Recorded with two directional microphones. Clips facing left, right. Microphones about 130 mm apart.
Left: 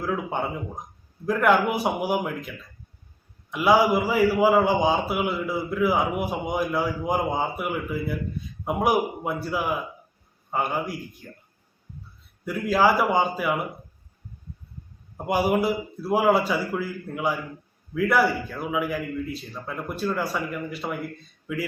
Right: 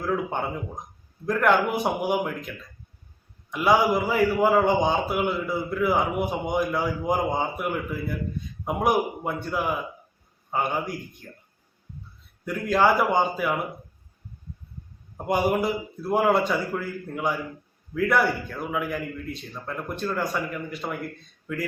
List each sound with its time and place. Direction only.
0.0 s a man's voice: 5° left (ahead or behind)
3.5 s a man's voice: centre (ahead or behind)
12.5 s a man's voice: 5° left (ahead or behind)
15.3 s a man's voice: 5° left (ahead or behind)